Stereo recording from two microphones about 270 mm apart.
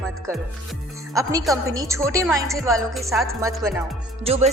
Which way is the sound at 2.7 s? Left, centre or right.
Centre.